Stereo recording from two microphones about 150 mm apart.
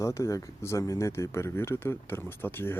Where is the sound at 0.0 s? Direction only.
20° left (ahead or behind).